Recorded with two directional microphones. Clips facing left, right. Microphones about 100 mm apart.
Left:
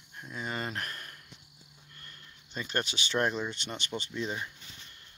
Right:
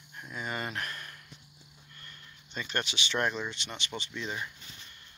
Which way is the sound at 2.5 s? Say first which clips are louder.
Left 1 dB; 40° left (ahead or behind).